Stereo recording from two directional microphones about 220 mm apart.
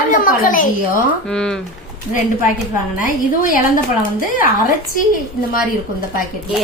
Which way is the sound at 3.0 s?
40° left (ahead or behind).